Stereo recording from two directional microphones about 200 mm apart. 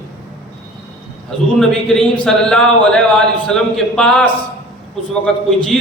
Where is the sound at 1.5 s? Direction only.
Centre (ahead or behind).